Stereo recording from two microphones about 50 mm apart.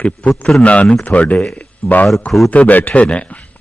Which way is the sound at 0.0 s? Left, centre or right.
Left.